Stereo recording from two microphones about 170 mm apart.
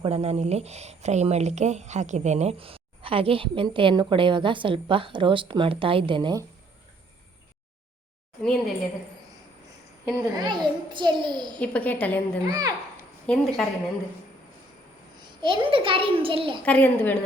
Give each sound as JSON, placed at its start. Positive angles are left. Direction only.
{"t": 0.0, "sound": "speech", "side_deg": -35}
{"t": 8.4, "sound": "a woman's voice", "side_deg": 0}
{"t": 10.3, "sound": "a child's voice", "side_deg": -25}
{"t": 11.6, "sound": "a woman's voice", "side_deg": 10}
{"t": 12.5, "sound": "a child's voice", "side_deg": -20}
{"t": 13.2, "sound": "a woman's voice", "side_deg": 5}
{"t": 15.2, "sound": "speech", "side_deg": -25}
{"t": 16.6, "sound": "a woman's voice", "side_deg": 10}